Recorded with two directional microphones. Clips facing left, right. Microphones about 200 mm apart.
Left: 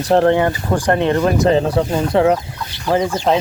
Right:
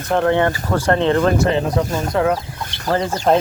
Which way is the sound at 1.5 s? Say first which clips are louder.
Left 3 dB; 30° left (ahead or behind).